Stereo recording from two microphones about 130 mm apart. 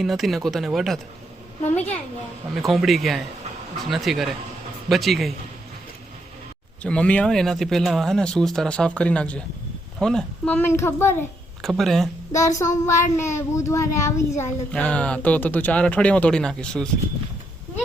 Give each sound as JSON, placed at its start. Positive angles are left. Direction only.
{"t": 0.0, "sound": "speech", "side_deg": 0}
{"t": 1.6, "sound": "speech", "side_deg": 10}
{"t": 2.6, "sound": "speech", "side_deg": 0}
{"t": 6.8, "sound": "speech", "side_deg": 10}
{"t": 11.6, "sound": "speech", "side_deg": 0}
{"t": 12.3, "sound": "speech", "side_deg": 25}
{"t": 14.7, "sound": "speech", "side_deg": 10}